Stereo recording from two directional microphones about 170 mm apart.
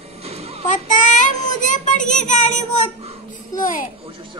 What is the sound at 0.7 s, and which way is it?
Child singing, 45° left (ahead or behind).